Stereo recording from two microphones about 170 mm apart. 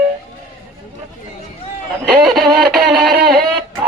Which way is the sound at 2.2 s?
Centre (ahead or behind).